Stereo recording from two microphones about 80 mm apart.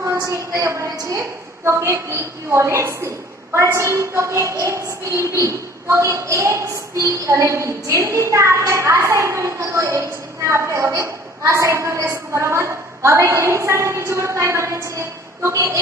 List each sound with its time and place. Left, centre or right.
0.0 s a woman's voice: right
1.7 s a woman's voice: right